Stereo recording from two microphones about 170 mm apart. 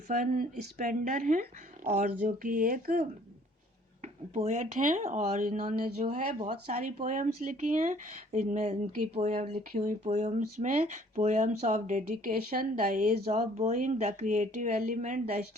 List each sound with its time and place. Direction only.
0.1 s speech: 50° right (ahead or behind)
4.0 s speech: 40° right (ahead or behind)
13.2 s speech: 40° right (ahead or behind)
13.7 s speech: 50° right (ahead or behind)